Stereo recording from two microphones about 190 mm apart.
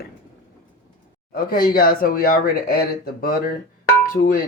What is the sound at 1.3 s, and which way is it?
Speech, 50° left (ahead or behind).